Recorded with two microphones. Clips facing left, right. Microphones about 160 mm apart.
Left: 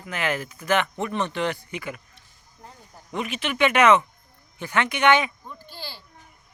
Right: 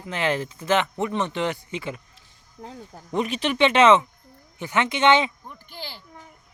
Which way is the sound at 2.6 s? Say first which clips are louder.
Right 8 dB; 90° right.